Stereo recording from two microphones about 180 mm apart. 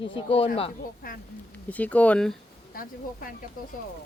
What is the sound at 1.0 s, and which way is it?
Speech, 55° left (ahead or behind).